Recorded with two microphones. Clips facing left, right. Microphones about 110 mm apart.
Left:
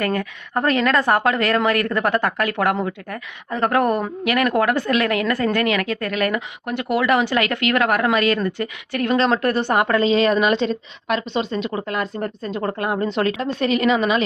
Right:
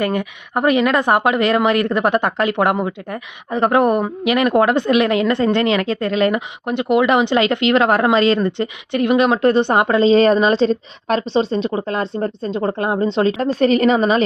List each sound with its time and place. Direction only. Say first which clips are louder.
0.0 s a woman's voice: right 3 dB; 20° right (ahead or behind)
10.1 s a woman's voice: right 4 dB; 35° right (ahead or behind)
13.4 s a woman's voice: right 7 dB; 40° right (ahead or behind)